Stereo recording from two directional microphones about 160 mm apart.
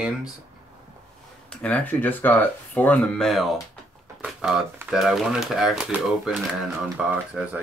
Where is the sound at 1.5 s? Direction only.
10° left (ahead or behind).